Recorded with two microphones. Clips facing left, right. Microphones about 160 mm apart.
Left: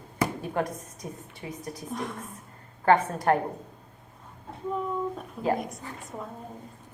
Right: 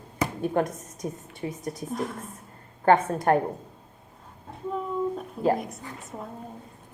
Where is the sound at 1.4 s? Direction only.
35° right (ahead or behind).